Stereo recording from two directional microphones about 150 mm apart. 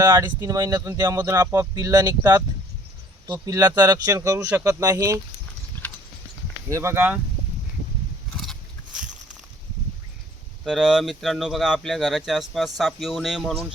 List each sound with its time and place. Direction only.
0.0 s speech: 20° right (ahead or behind)
6.7 s speech: 20° right (ahead or behind)
10.6 s speech: centre (ahead or behind)